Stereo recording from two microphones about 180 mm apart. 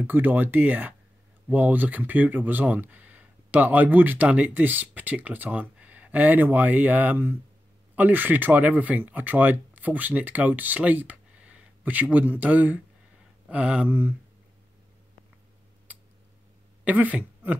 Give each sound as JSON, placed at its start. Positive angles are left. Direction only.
{"t": 0.0, "sound": "speech", "side_deg": -10}
{"t": 16.8, "sound": "speech", "side_deg": -10}